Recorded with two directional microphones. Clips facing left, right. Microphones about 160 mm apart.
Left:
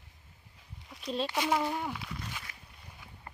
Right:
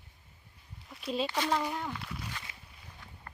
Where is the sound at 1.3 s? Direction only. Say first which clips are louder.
Left 1 dB; 10° left (ahead or behind).